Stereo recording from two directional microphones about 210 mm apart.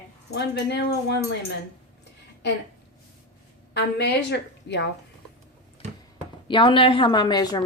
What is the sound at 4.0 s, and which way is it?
Speech, 55° left (ahead or behind).